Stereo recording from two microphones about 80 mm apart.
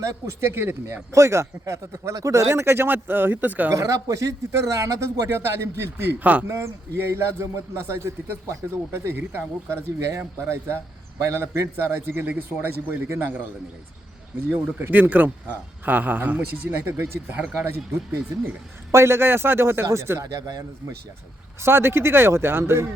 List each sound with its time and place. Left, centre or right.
0.0 s a man's voice: right
3.7 s a man's voice: right
6.5 s a man's voice: right
14.5 s a man's voice: right
20.3 s speech: right
21.6 s a man's voice: right